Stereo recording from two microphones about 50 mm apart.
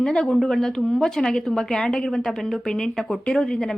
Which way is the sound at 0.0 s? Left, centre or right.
Centre.